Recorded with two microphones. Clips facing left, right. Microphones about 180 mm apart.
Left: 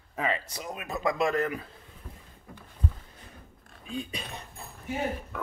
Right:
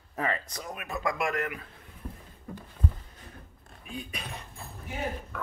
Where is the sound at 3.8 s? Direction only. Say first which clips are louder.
Left 4 dB; 25° left (ahead or behind).